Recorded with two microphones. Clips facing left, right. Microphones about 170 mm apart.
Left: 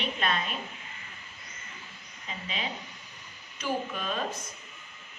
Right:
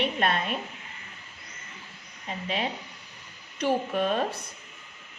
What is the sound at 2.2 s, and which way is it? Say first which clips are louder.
A man's voice: right 6 dB; 55° right (ahead or behind).